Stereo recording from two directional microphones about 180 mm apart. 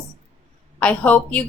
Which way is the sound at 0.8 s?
5° left (ahead or behind).